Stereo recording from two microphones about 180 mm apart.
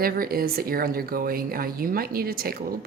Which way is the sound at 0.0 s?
55° right (ahead or behind).